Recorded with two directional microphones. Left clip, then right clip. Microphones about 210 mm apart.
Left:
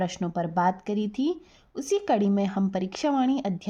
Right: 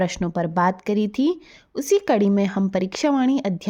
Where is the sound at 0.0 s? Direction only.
35° right (ahead or behind).